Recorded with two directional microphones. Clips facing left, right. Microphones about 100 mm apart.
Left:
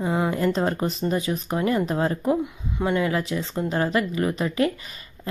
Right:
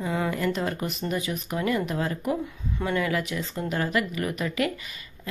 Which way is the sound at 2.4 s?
20° left (ahead or behind).